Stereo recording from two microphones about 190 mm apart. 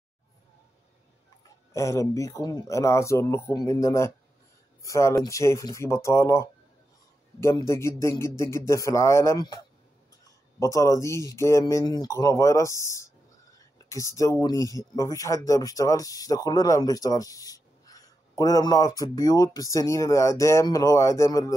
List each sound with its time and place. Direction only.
1.7 s speech: 15° left (ahead or behind)